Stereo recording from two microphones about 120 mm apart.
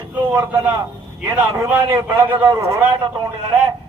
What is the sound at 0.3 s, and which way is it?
A man's voice, 20° right (ahead or behind).